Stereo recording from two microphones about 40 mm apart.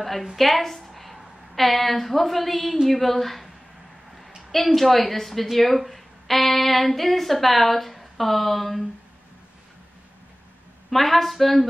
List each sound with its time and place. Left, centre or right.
0.0 s a woman's voice: centre
4.5 s a woman's voice: centre
10.9 s a woman's voice: centre